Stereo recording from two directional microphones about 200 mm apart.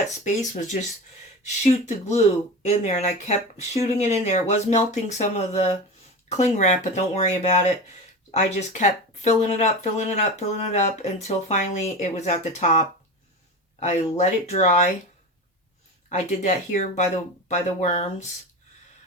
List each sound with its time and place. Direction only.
0.3 s speech: 40° left (ahead or behind)
16.0 s speech: 35° left (ahead or behind)